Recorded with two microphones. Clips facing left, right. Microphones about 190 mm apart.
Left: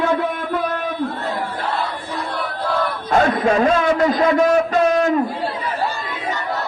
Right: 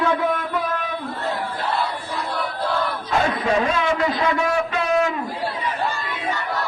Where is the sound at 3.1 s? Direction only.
50° left (ahead or behind).